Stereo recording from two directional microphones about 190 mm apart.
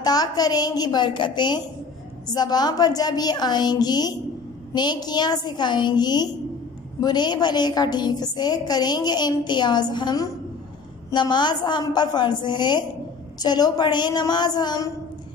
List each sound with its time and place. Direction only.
0.0 s a woman's voice: 20° left (ahead or behind)